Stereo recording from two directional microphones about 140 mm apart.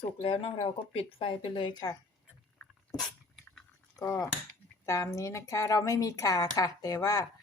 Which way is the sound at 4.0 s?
25° left (ahead or behind).